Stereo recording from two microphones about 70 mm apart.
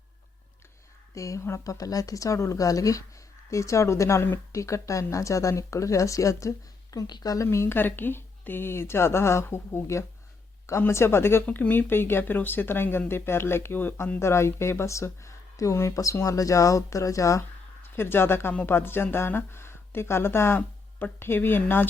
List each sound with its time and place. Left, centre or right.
1.1 s speech: left
6.9 s speech: left
7.4 s speech: left
11.4 s speech: left
14.2 s speech: left
17.8 s speech: left